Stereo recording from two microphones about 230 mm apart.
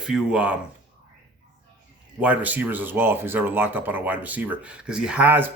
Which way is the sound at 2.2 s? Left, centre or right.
Centre.